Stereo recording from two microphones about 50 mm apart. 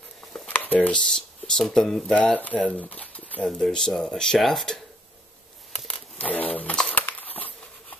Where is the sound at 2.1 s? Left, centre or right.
Left.